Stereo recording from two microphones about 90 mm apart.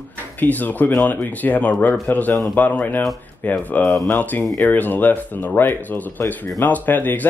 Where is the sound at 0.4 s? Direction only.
20° left (ahead or behind).